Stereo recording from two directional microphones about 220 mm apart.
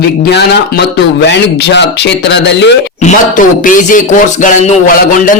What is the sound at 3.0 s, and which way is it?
A man's voice, 35° left (ahead or behind).